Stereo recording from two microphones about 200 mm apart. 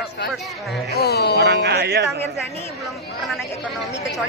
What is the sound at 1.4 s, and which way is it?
Speech, 55° right (ahead or behind).